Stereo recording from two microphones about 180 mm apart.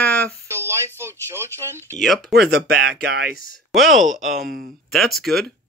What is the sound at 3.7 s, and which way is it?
Speech, centre (ahead or behind).